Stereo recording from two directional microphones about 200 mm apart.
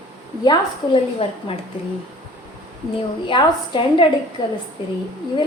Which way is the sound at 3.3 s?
25° left (ahead or behind).